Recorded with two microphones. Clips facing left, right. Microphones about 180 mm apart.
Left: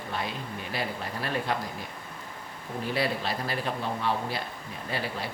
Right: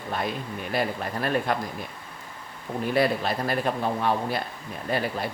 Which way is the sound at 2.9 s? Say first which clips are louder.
Right 6 dB; 50° right (ahead or behind).